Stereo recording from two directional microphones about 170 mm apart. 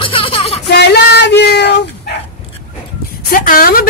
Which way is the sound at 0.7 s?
80° left.